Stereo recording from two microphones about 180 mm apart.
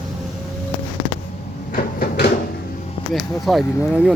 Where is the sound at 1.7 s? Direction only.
55° left (ahead or behind).